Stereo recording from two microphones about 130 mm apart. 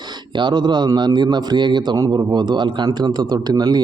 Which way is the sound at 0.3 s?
35° right (ahead or behind).